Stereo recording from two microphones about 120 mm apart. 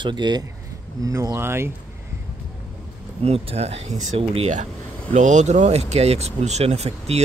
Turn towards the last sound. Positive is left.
turn(degrees=-65)  # may be behind; listen again after turning